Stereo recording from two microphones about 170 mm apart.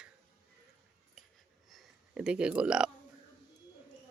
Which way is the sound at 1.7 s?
5° right (ahead or behind).